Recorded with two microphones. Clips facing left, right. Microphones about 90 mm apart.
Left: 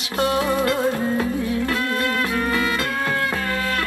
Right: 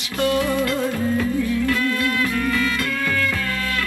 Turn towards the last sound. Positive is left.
turn(degrees=35)  # may be behind; listen again after turning